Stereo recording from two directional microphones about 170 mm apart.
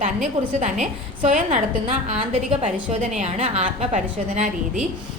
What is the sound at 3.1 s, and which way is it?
A woman's voice, 40° right (ahead or behind).